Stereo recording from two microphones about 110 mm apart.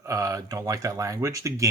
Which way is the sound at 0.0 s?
30° right (ahead or behind).